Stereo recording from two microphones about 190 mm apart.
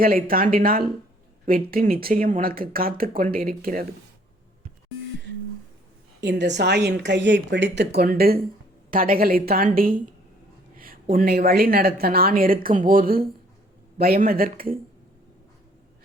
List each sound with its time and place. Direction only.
0.0 s speech: 50° right (ahead or behind)
6.1 s speech: 65° right (ahead or behind); by 10.0 s 45° right (ahead or behind)
11.1 s speech: 50° right (ahead or behind)